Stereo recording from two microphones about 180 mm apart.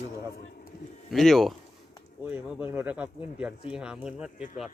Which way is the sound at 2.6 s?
10° right (ahead or behind).